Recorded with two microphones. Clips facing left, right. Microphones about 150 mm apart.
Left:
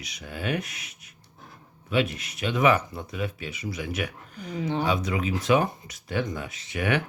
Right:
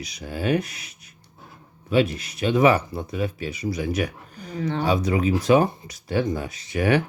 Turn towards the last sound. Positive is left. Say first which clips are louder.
# right 5 dB
turn(degrees=-35)  # may be behind; listen again after turning